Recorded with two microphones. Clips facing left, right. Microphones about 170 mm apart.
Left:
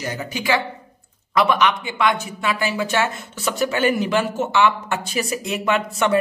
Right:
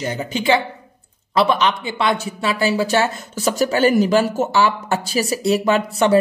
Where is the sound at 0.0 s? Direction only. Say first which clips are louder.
Right 5 dB; 25° right (ahead or behind).